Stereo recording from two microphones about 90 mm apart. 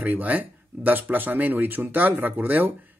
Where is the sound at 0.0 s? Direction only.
20° right (ahead or behind).